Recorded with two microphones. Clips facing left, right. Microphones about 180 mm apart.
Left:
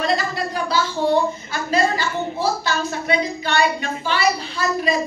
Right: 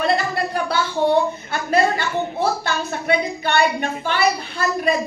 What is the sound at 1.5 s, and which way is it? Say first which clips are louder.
A woman's voice: right 2 dB; 60° right (ahead or behind).